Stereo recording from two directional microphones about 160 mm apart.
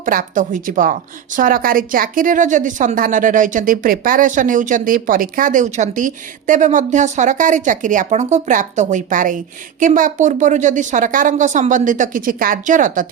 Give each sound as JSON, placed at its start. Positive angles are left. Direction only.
{"t": 0.0, "sound": "a woman's voice", "side_deg": -60}